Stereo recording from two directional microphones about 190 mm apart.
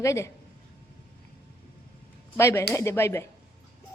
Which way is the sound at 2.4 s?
15° left (ahead or behind).